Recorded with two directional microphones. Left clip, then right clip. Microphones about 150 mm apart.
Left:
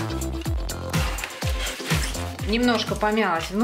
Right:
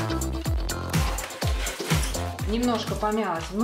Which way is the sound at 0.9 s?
Centre (ahead or behind).